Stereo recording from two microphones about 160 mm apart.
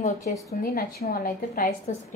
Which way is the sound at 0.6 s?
70° left (ahead or behind).